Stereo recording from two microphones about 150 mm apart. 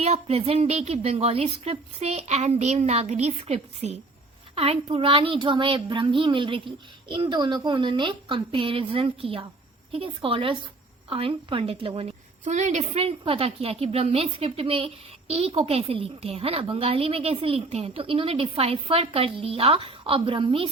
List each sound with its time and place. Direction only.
0.0 s a woman's voice: 40° right (ahead or behind)